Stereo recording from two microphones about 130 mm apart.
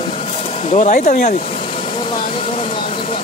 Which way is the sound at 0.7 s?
65° left (ahead or behind).